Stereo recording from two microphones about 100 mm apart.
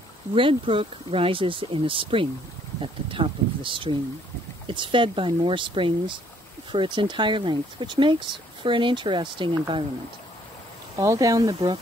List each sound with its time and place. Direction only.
0.3 s speech: 65° right (ahead or behind)
11.0 s speech: 35° right (ahead or behind)